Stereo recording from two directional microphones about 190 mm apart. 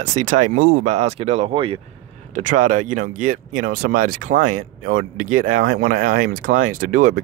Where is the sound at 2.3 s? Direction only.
40° right (ahead or behind).